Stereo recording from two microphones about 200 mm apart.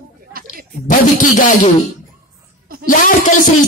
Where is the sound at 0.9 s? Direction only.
40° left (ahead or behind).